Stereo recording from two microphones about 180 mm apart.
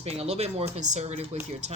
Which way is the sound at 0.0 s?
35° right (ahead or behind).